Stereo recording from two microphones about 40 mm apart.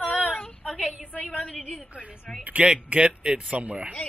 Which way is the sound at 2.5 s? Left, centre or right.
Right.